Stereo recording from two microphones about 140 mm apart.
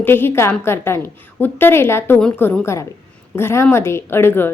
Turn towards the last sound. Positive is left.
turn(degrees=15)  # may be behind; listen again after turning